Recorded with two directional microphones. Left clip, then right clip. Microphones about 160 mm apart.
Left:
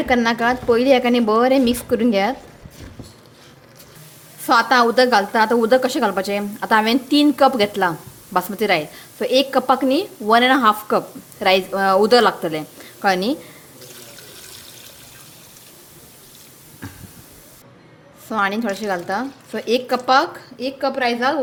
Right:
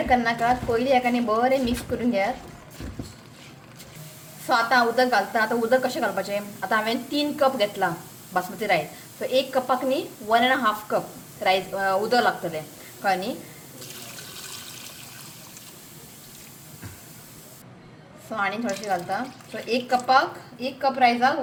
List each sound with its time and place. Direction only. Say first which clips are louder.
0.1 s a woman's voice: left 4 dB; 90° left
4.4 s a woman's voice: left 6 dB; 85° left
18.3 s a woman's voice: left 6 dB; 90° left; by 21.3 s 65° left (ahead or behind)